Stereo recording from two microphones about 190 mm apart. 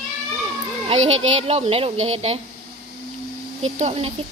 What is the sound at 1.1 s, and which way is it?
Speech, 35° right (ahead or behind).